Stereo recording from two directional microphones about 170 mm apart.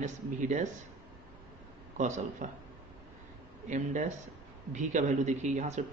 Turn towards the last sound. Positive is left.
turn(degrees=-45)  # may be behind; listen again after turning